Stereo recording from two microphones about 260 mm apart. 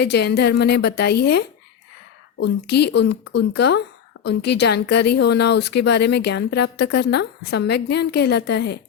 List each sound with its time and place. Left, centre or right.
0.0 s a woman's voice: left